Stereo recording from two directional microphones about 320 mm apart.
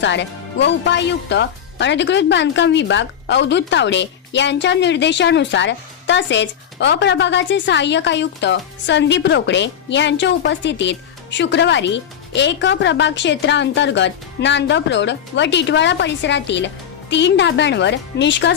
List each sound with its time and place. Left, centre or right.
0.0 s speech: left